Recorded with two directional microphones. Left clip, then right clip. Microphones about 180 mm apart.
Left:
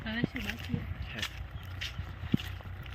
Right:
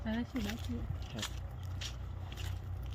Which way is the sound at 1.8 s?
5° right (ahead or behind).